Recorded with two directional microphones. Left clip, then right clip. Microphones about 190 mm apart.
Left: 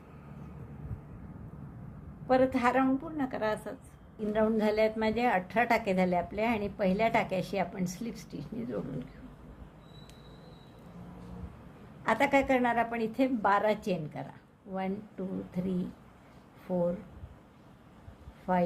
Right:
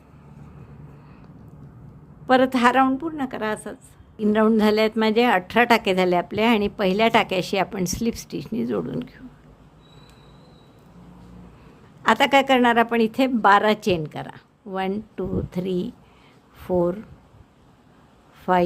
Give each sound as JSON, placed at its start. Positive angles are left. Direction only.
{"t": 2.2, "sound": "a woman's voice", "side_deg": -45}
{"t": 12.0, "sound": "a woman's voice", "side_deg": -40}
{"t": 16.7, "sound": "speech", "side_deg": -60}
{"t": 18.5, "sound": "a woman's voice", "side_deg": -50}